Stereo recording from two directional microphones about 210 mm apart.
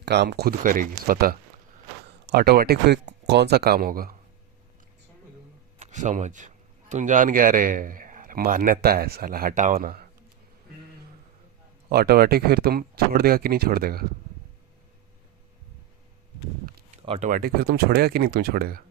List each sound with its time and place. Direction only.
0.0 s speech: 55° right (ahead or behind)
5.8 s speech: 35° right (ahead or behind)
11.9 s speech: 45° right (ahead or behind)
17.1 s speech: 35° right (ahead or behind)